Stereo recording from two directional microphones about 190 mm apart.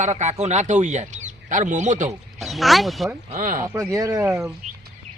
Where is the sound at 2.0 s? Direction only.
Centre (ahead or behind).